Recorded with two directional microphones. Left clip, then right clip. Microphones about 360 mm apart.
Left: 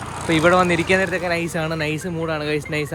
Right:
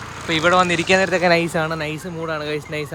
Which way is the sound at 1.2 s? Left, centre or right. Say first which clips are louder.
Right 6 dB; right.